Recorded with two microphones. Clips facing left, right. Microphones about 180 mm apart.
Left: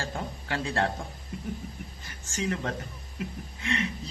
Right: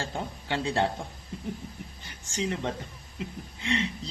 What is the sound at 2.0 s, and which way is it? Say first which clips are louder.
A man's voice: even; 30° right (ahead or behind).